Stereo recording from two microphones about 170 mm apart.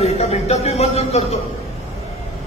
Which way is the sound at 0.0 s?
40° left (ahead or behind).